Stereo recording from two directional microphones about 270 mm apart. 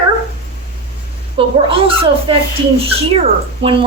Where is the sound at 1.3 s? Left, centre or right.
Centre.